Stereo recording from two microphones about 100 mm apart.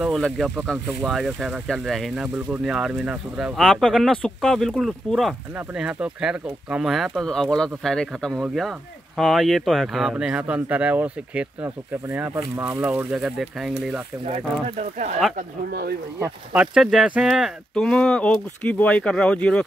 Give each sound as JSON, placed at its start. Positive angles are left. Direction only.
{"t": 0.1, "sound": "speech", "side_deg": 5}
{"t": 2.2, "sound": "speech", "side_deg": -15}
{"t": 13.2, "sound": "speech", "side_deg": 0}
{"t": 16.5, "sound": "speech", "side_deg": -5}
{"t": 17.7, "sound": "speech", "side_deg": 5}